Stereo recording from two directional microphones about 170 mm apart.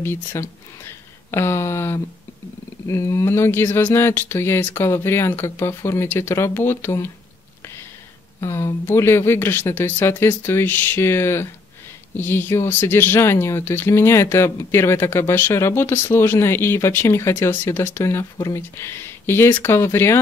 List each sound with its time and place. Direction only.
0.0 s speech: 15° left (ahead or behind)
8.4 s speech: 15° left (ahead or behind)